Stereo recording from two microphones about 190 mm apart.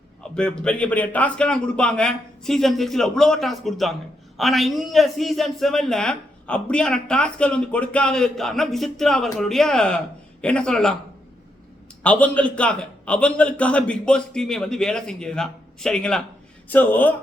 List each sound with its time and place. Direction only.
0.2 s a man's voice: 5° left (ahead or behind)
12.0 s a man's voice: 5° left (ahead or behind)